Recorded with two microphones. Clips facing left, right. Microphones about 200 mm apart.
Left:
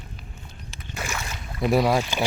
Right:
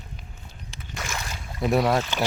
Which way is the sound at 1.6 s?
Centre (ahead or behind).